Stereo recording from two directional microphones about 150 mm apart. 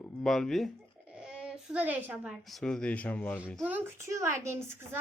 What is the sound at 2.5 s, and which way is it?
Speech, 5° left (ahead or behind).